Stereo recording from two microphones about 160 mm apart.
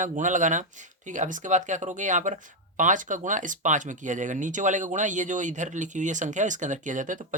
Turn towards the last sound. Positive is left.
turn(degrees=-55)  # may be behind; listen again after turning